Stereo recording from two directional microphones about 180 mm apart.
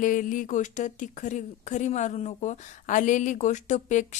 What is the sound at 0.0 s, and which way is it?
Speech, 45° left (ahead or behind).